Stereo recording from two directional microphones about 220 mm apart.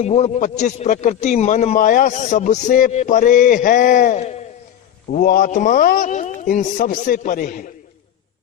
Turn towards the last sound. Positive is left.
turn(degrees=35)  # may be behind; listen again after turning